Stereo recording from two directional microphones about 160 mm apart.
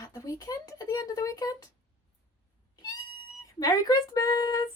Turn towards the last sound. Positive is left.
turn(degrees=25)  # may be behind; listen again after turning